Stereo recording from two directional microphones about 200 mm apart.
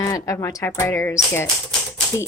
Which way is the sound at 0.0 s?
15° left (ahead or behind).